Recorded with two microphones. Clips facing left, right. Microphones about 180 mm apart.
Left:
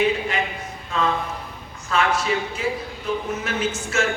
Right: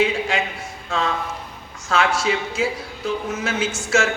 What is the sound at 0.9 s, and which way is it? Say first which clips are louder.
Speech: even; 90° right.